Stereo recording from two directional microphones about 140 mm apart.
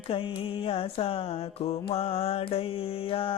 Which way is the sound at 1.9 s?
45° left (ahead or behind).